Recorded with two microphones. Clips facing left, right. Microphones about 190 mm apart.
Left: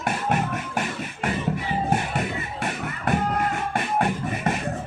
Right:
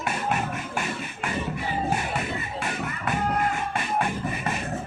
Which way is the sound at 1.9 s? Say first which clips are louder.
Left 3 dB; 55° left (ahead or behind).